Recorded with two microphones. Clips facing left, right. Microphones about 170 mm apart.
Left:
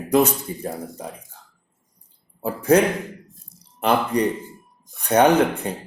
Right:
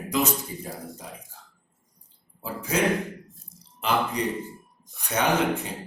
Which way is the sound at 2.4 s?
60° left (ahead or behind).